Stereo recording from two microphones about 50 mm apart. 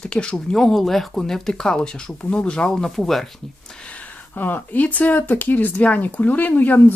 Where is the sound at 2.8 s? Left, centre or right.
Centre.